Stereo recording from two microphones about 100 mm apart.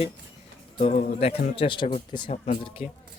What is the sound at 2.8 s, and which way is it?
Speech, 90° left.